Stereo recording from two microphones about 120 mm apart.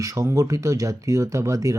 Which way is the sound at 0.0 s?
25° right (ahead or behind).